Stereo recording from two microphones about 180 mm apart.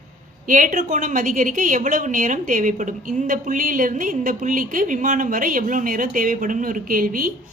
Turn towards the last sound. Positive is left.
turn(degrees=-50)  # may be behind; listen again after turning